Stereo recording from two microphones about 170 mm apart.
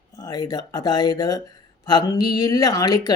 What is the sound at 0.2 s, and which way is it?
Speech, 25° left (ahead or behind).